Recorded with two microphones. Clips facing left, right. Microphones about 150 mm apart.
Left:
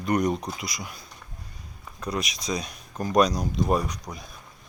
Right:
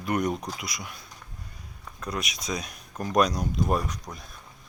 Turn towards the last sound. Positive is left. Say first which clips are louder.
# left 2 dB
turn(degrees=0)  # may be behind; listen again after turning